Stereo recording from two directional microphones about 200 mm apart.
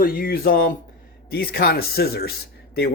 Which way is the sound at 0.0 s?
45° left (ahead or behind).